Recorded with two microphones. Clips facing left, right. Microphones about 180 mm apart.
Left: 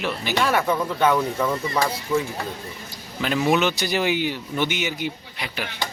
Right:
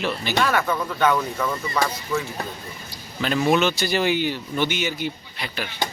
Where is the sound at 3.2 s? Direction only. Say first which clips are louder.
Right 1 dB; 10° left (ahead or behind).